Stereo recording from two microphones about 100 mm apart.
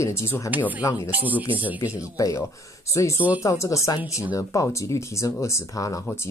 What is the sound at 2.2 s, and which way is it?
Speech, 35° left (ahead or behind).